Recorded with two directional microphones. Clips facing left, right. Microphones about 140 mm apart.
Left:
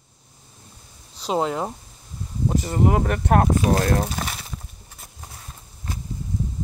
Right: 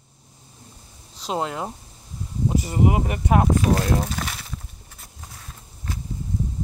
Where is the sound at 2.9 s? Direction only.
10° right (ahead or behind).